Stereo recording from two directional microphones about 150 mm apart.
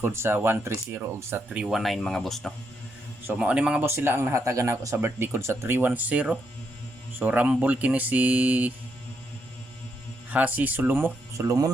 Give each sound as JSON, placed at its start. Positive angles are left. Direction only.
{"t": 0.0, "sound": "speech", "side_deg": -15}
{"t": 1.5, "sound": "speech", "side_deg": -5}
{"t": 10.3, "sound": "speech", "side_deg": -10}